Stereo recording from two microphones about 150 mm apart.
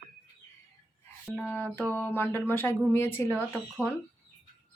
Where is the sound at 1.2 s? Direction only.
10° left (ahead or behind).